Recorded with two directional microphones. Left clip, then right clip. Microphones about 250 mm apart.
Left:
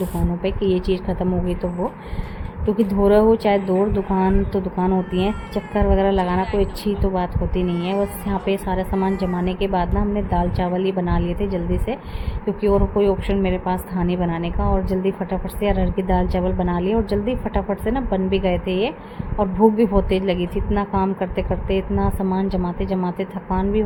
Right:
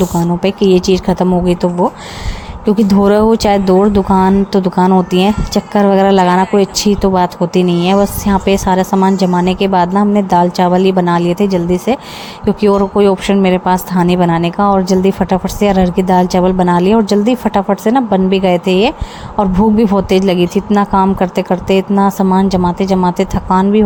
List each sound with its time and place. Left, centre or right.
0.4 s speech: right